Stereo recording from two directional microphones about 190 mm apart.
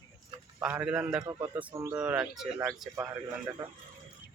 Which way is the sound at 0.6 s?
5° right (ahead or behind).